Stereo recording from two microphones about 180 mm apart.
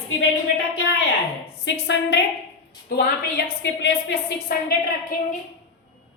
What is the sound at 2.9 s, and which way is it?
A woman's voice, 55° left (ahead or behind).